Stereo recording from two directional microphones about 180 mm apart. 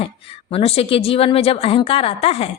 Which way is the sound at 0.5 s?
30° left (ahead or behind).